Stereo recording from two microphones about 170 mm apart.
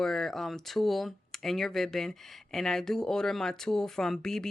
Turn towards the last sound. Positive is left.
turn(degrees=5)  # may be behind; listen again after turning